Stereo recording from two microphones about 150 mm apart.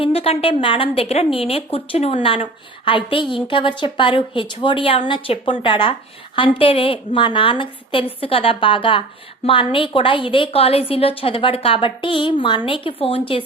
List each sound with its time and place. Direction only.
0.0 s a woman's voice: 40° left (ahead or behind)